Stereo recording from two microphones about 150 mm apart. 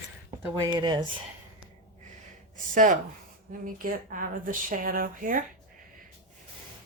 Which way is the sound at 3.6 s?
65° right (ahead or behind).